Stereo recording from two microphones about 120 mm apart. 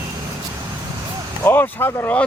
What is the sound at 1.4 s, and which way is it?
Speech, 20° left (ahead or behind).